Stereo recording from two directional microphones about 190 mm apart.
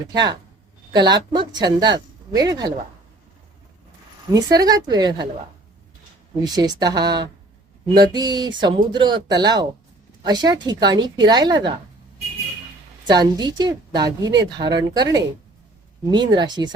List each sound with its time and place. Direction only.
0.1 s a woman's voice: 20° right (ahead or behind)
4.3 s a woman's voice: 20° right (ahead or behind)
6.4 s a woman's voice: 20° right (ahead or behind)
13.1 s a woman's voice: 20° right (ahead or behind)